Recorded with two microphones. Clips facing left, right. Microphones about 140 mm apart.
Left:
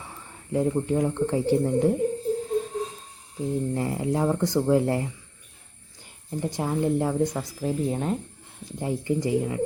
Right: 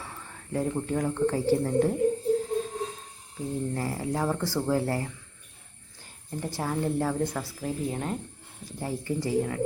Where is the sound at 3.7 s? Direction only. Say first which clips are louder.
Left 4 dB; 20° left (ahead or behind).